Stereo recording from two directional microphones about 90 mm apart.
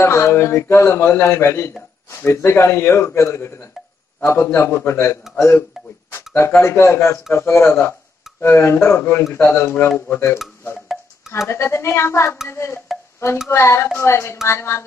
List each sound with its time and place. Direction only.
0.0 s a man's voice: 30° left (ahead or behind)